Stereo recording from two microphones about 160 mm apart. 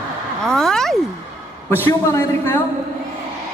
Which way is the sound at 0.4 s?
5° left (ahead or behind).